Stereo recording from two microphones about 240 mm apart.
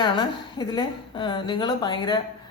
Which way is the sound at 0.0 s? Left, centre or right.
Centre.